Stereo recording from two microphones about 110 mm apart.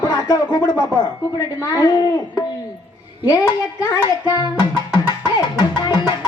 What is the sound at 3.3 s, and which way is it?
Speech, 35° left (ahead or behind).